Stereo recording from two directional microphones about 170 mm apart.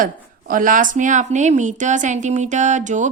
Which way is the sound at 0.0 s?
55° right (ahead or behind).